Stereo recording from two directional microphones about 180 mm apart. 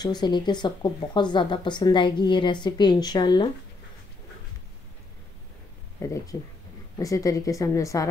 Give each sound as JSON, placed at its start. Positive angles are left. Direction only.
{"t": 0.0, "sound": "speech", "side_deg": 25}
{"t": 5.9, "sound": "speech", "side_deg": 15}